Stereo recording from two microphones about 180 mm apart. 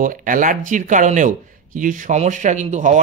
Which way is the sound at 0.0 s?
50° right (ahead or behind).